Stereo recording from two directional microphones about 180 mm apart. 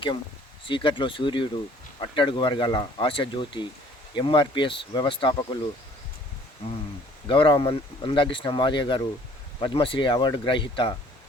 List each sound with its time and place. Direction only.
0.6 s speech: 25° left (ahead or behind)
7.3 s speech: 25° left (ahead or behind)